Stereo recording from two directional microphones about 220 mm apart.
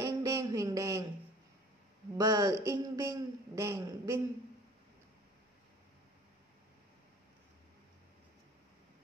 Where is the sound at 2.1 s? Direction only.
15° right (ahead or behind).